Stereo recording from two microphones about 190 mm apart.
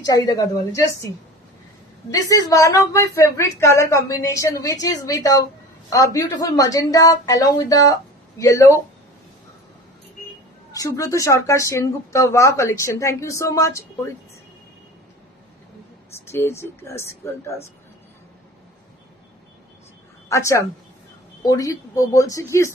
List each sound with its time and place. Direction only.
0.0 s speech: 15° left (ahead or behind)
2.5 s a woman's voice: 15° left (ahead or behind)
10.7 s speech: 15° left (ahead or behind)
16.3 s speech: 15° left (ahead or behind)
20.2 s a woman's voice: 15° left (ahead or behind)